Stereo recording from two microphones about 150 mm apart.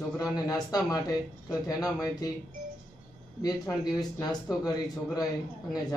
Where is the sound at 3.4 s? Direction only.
25° left (ahead or behind).